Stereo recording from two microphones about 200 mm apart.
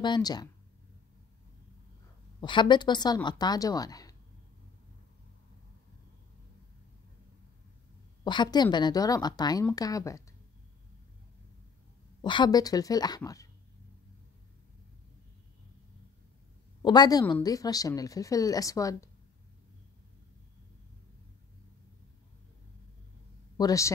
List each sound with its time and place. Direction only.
0.0 s a woman's voice: 20° left (ahead or behind)
2.4 s a woman's voice: 25° left (ahead or behind)
8.2 s a woman's voice: 20° left (ahead or behind)
12.2 s a woman's voice: 20° left (ahead or behind)
16.8 s a woman's voice: 20° left (ahead or behind)
23.6 s a woman's voice: 15° left (ahead or behind)